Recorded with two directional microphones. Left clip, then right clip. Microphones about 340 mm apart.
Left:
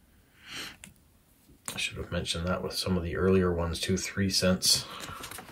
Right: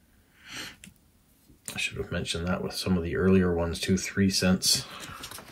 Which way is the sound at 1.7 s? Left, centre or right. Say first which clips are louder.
Right 2 dB; centre.